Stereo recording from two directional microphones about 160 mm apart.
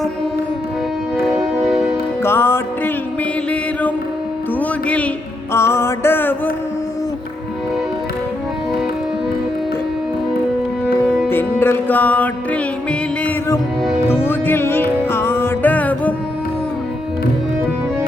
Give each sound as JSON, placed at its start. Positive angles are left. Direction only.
{"t": 1.6, "sound": "music", "side_deg": -5}
{"t": 2.2, "sound": "music", "side_deg": 15}
{"t": 4.6, "sound": "music", "side_deg": 10}
{"t": 11.3, "sound": "music", "side_deg": 15}